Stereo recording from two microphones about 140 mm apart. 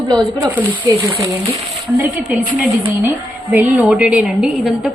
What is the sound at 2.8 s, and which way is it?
A woman's voice, 10° right (ahead or behind).